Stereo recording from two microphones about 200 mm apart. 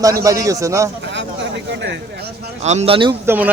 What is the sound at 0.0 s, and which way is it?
Speech, 15° right (ahead or behind).